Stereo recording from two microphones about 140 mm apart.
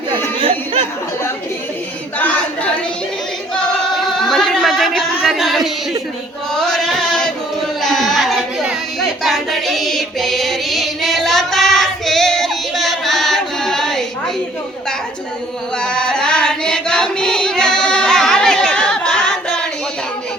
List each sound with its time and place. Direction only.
0.1 s chatter: 40° right (ahead or behind)
2.1 s a sound: 10° left (ahead or behind)
4.0 s music: centre (ahead or behind)
6.5 s a sound: 5° left (ahead or behind)
9.2 s child singing: centre (ahead or behind)
15.8 s chant: 5° left (ahead or behind)